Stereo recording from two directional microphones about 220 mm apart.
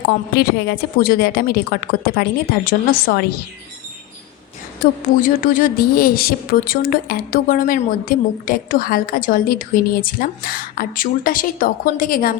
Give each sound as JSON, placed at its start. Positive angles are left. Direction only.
{"t": 0.1, "sound": "a woman's voice", "side_deg": 45}
{"t": 4.8, "sound": "a woman's voice", "side_deg": 35}